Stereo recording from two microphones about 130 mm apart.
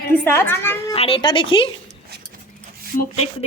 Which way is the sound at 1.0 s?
45° left (ahead or behind).